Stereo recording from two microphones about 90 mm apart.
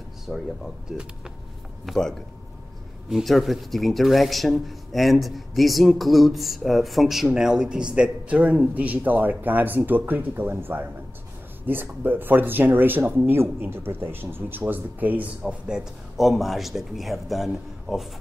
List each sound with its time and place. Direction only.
0.3 s speech: 5° left (ahead or behind)
0.8 s speech: 5° right (ahead or behind)
1.9 s speech: 5° left (ahead or behind); by 15.3 s 20° right (ahead or behind)
15.4 s speech: 5° right (ahead or behind)